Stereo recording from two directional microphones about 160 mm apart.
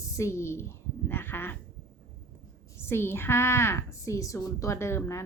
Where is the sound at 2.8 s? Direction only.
15° left (ahead or behind).